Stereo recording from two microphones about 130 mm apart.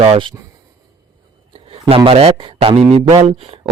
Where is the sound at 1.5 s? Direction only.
45° right (ahead or behind).